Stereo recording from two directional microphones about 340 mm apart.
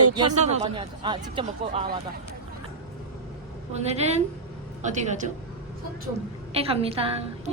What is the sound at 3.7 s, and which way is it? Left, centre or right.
Speech, centre.